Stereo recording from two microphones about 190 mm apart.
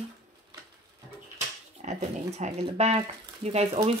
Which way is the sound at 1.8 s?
35° right (ahead or behind).